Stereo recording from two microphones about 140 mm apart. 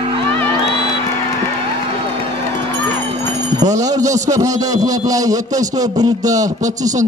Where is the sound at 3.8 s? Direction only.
25° right (ahead or behind).